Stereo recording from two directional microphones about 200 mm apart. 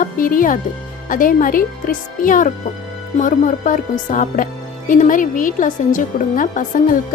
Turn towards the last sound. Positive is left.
turn(degrees=40)  # may be behind; listen again after turning